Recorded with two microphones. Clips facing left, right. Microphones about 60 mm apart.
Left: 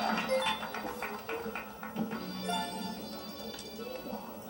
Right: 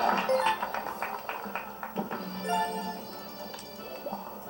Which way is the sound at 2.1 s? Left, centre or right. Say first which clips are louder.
Right 5 dB; right.